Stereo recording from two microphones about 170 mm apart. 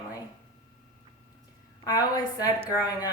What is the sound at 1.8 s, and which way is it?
Speech, 25° left (ahead or behind).